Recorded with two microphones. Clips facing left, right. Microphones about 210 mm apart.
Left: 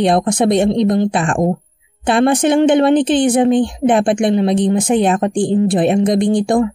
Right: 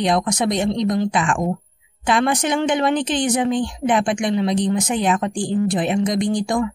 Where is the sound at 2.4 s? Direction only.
55° left (ahead or behind).